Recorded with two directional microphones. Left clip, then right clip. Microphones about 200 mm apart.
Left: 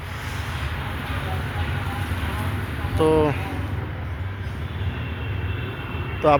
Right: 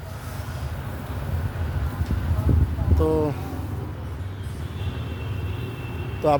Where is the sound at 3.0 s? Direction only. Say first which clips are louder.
Left 4 dB; 5° right (ahead or behind).